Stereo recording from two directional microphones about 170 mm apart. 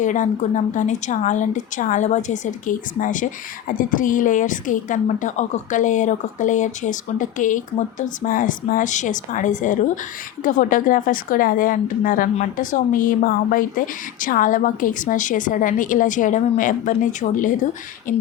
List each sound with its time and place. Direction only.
0.0 s a woman's voice: 45° left (ahead or behind)